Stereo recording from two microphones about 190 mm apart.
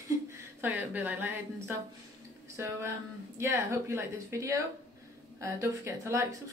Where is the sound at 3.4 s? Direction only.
15° right (ahead or behind).